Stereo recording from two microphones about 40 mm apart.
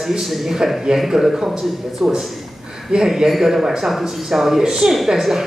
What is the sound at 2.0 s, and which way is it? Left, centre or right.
Speech, right.